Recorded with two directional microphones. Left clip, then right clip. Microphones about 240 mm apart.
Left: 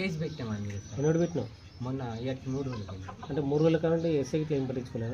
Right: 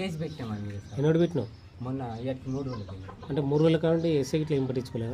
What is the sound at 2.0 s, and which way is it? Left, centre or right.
Speech, centre.